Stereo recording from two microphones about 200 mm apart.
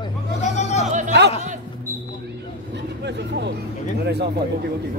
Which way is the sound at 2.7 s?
60° right (ahead or behind).